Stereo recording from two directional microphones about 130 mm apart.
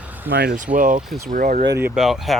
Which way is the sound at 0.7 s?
90° right.